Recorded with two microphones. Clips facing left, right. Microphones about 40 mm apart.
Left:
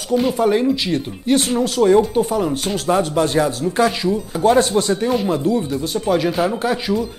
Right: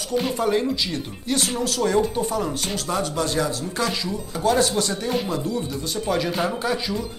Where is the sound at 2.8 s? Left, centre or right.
Left; by 6.5 s centre.